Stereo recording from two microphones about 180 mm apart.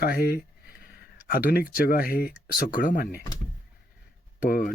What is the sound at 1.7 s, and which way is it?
Speech, 55° left (ahead or behind).